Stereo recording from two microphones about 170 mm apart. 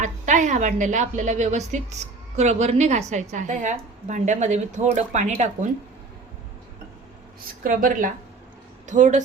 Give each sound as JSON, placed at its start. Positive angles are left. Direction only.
{"t": 0.0, "sound": "a woman's voice", "side_deg": -45}
{"t": 7.6, "sound": "a woman's voice", "side_deg": -55}